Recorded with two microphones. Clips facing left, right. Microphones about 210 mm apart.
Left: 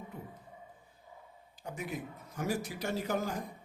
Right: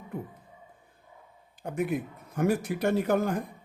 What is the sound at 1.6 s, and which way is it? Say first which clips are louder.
Speech: right 10 dB; 55° right (ahead or behind).